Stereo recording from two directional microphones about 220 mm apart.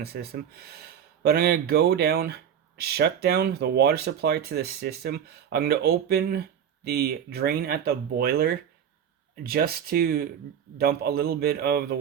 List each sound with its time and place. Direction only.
0.0 s speech: 45° right (ahead or behind)